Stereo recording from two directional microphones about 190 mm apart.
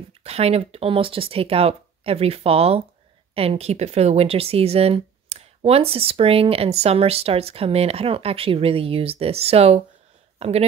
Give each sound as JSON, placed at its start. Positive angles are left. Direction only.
{"t": 0.2, "sound": "speech", "side_deg": -35}